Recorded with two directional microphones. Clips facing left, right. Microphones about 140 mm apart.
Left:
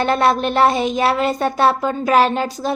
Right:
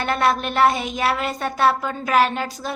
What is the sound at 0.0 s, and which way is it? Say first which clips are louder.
Speech: left 4 dB; 30° left (ahead or behind).